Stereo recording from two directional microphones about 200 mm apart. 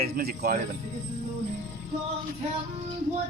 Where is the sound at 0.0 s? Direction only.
50° right (ahead or behind).